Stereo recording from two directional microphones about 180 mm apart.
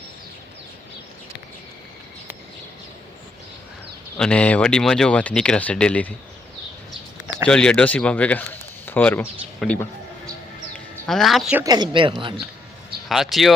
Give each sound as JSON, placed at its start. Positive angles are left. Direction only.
{"t": 4.2, "sound": "speech", "side_deg": 5}
{"t": 7.4, "sound": "speech", "side_deg": 5}
{"t": 11.0, "sound": "speech", "side_deg": 0}
{"t": 11.6, "sound": "speech", "side_deg": -25}
{"t": 13.1, "sound": "speech", "side_deg": 0}